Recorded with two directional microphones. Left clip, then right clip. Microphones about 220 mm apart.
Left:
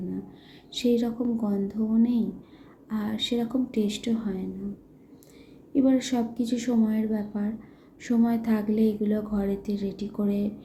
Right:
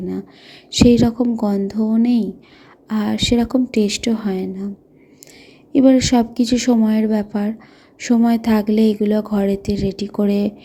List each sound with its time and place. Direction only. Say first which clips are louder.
0.7 s speech: right 11 dB; 40° right (ahead or behind)
5.7 s speech: right 11 dB; 40° right (ahead or behind)